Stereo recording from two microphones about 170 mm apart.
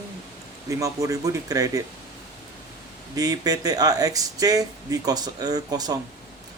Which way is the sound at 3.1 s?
20° right (ahead or behind).